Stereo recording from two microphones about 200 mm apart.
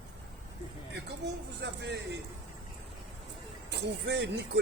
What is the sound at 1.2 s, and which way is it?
Speech, 60° right (ahead or behind).